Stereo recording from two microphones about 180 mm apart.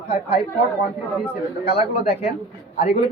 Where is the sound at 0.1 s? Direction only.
30° left (ahead or behind).